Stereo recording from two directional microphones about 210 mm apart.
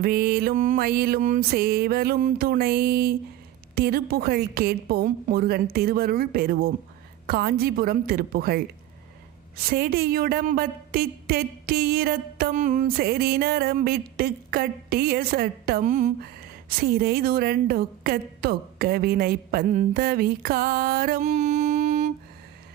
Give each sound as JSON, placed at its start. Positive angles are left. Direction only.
{"t": 0.0, "sound": "a woman's voice", "side_deg": -45}
{"t": 9.6, "sound": "a woman's voice", "side_deg": -45}